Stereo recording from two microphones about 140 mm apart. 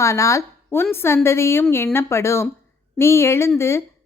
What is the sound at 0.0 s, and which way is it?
Speech, 20° left (ahead or behind).